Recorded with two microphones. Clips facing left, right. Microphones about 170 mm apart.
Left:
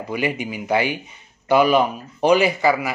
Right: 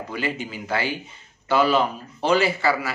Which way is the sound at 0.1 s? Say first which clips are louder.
Left 6 dB; 15° left (ahead or behind).